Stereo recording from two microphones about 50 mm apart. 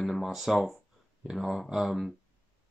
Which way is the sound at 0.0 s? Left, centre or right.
Centre.